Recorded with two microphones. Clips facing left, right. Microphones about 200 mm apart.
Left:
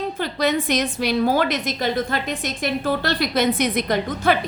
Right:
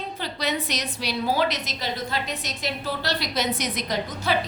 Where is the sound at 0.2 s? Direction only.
50° left (ahead or behind).